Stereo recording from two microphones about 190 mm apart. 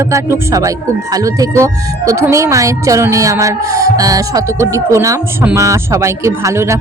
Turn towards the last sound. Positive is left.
turn(degrees=-15)  # may be behind; listen again after turning